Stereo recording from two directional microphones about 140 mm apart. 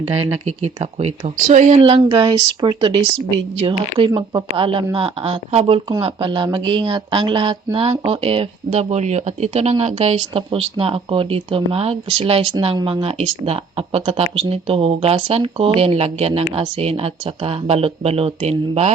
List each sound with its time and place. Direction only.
0.4 s speech: 50° right (ahead or behind)
1.5 s speech: 65° right (ahead or behind)
1.8 s speech: 40° right (ahead or behind)